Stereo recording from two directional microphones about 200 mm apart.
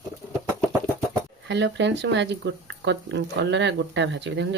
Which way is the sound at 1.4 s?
60° right (ahead or behind).